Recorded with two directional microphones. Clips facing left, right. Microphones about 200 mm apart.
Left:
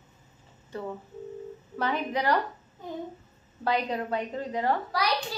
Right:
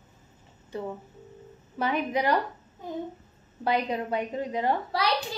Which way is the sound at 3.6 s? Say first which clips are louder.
Right 1 dB; 15° right (ahead or behind).